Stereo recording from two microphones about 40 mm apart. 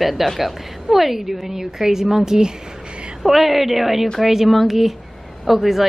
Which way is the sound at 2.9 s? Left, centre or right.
Right.